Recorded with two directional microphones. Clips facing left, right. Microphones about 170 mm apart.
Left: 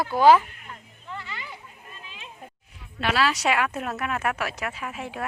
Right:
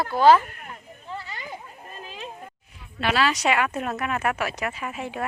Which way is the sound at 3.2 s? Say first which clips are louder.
Right 1 dB; centre (ahead or behind).